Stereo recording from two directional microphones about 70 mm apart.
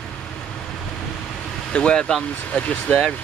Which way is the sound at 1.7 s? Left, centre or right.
Centre.